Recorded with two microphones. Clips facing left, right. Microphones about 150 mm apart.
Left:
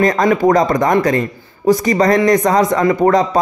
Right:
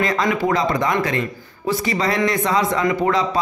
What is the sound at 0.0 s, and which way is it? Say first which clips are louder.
A man's voice: left 7 dB; 45° left (ahead or behind).